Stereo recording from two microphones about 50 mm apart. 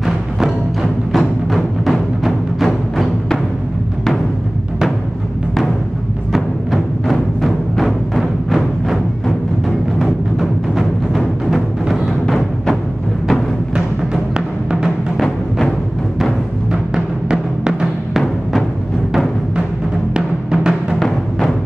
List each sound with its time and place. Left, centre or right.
1.1 s music: centre
6.3 s music: centre
11.1 s music: centre
16.9 s music: centre
20.2 s music: centre